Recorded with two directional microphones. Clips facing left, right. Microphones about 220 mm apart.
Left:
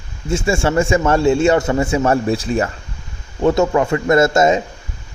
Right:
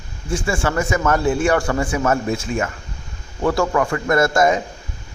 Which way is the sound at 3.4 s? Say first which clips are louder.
Left 4 dB; 20° left (ahead or behind).